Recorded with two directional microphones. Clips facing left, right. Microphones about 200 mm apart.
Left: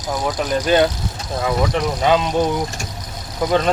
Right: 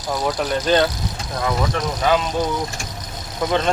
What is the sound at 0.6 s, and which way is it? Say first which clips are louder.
Speech: left 2 dB; 10° left (ahead or behind).